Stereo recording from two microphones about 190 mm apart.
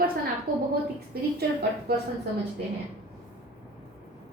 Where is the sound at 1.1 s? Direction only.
55° right (ahead or behind).